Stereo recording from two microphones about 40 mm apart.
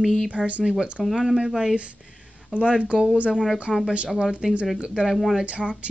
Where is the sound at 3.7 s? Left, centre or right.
Centre.